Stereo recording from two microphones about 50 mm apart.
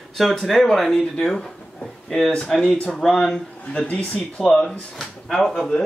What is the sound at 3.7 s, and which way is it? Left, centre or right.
Speech, left.